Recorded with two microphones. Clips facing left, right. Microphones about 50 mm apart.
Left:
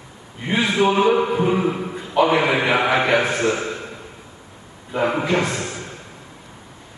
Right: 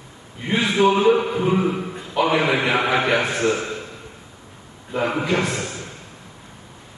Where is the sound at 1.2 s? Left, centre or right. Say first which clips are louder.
Left 2 dB; left.